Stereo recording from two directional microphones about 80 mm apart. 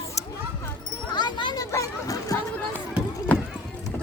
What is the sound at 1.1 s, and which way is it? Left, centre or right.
Speech, left.